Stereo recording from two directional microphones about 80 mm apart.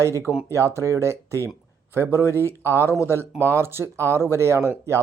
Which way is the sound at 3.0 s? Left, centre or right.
Right.